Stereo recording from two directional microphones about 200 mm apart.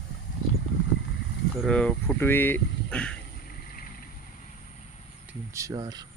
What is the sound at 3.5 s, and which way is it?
Vehicle, 45° left (ahead or behind).